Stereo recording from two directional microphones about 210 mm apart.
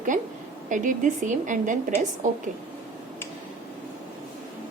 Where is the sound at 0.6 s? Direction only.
35° right (ahead or behind).